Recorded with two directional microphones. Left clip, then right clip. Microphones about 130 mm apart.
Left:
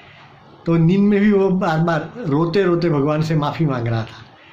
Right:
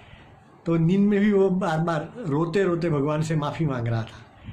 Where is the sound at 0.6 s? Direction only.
20° right (ahead or behind).